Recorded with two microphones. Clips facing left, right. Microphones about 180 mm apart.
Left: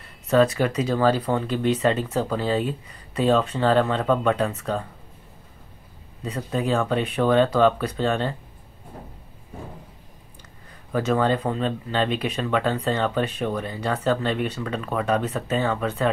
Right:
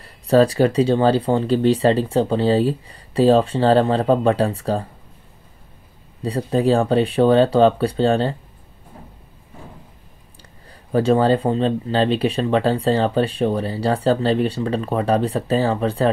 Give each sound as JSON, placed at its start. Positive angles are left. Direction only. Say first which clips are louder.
{"t": 0.0, "sound": "speech", "louder": "right 4 dB", "side_deg": -35}
{"t": 6.2, "sound": "speech", "louder": "right 7 dB", "side_deg": -35}
{"t": 10.7, "sound": "speech", "louder": "right 6 dB", "side_deg": -30}